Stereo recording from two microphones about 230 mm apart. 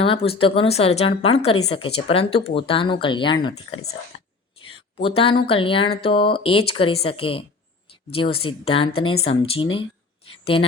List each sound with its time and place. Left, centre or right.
0.0 s speech: left
5.0 s speech: left